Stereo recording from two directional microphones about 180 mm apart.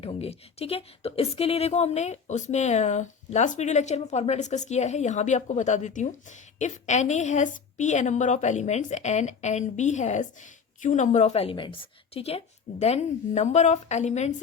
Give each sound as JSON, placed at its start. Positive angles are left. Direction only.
{"t": 0.0, "sound": "a woman's voice", "side_deg": 35}